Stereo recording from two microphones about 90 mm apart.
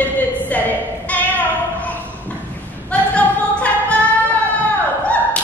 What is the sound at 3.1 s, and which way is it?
Music, 15° left (ahead or behind).